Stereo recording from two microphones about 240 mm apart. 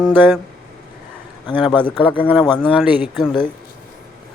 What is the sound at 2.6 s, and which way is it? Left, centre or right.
Speech, centre.